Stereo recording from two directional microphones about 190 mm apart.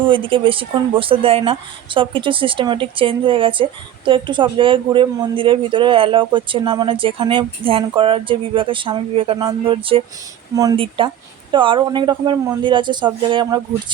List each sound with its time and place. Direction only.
0.0 s speech: 25° right (ahead or behind)